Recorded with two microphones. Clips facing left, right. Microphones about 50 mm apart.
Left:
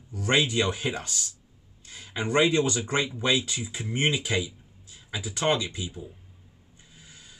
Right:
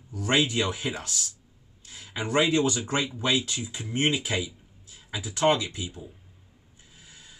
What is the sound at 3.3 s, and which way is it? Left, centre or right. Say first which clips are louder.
Speech: even; centre.